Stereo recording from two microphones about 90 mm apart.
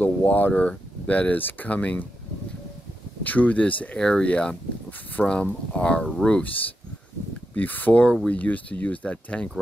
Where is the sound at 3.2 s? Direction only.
20° left (ahead or behind).